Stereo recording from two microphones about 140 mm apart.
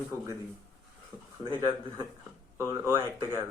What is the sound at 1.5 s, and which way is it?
A man's voice, 30° right (ahead or behind).